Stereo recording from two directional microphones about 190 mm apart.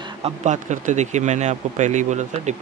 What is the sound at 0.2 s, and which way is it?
Speech, 40° right (ahead or behind).